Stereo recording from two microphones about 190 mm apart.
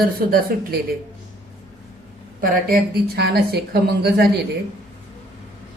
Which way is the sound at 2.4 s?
50° right (ahead or behind).